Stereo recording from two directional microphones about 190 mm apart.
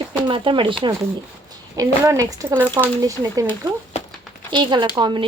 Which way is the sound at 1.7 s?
15° right (ahead or behind).